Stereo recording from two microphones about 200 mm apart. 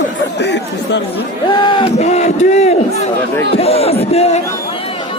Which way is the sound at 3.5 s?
30° left (ahead or behind).